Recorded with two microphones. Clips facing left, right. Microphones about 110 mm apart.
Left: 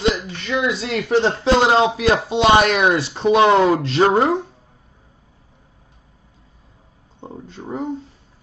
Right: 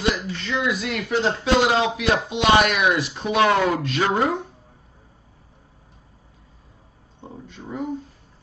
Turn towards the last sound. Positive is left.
turn(degrees=35)  # may be behind; listen again after turning